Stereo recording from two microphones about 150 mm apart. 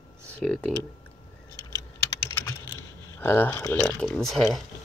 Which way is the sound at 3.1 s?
15° left (ahead or behind).